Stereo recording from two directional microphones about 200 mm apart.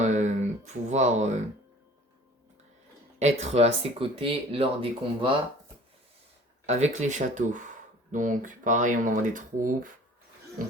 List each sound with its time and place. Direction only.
0.0 s a sound: 35° right (ahead or behind)
3.2 s speech: 35° right (ahead or behind)
6.7 s speech: 35° right (ahead or behind)